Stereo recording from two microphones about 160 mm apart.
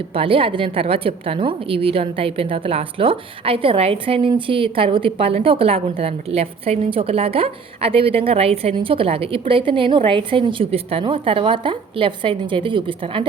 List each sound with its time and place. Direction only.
0.1 s a woman's voice: 35° right (ahead or behind)